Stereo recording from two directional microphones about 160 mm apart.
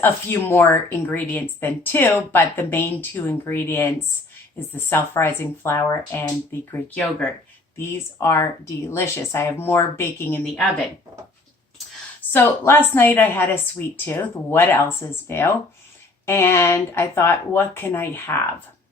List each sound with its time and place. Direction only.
0.0 s speech: 15° left (ahead or behind)
12.3 s speech: 15° left (ahead or behind)